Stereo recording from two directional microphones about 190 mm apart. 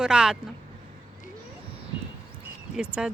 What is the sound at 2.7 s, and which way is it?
Speech, 5° right (ahead or behind).